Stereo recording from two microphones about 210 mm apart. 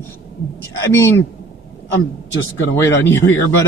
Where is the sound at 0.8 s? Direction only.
10° left (ahead or behind).